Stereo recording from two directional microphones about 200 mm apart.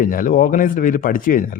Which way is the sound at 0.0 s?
45° left (ahead or behind).